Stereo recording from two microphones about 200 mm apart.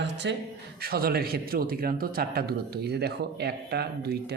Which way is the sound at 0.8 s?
50° right (ahead or behind).